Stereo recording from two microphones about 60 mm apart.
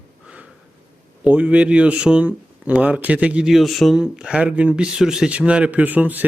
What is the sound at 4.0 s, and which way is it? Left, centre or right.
Speech, centre.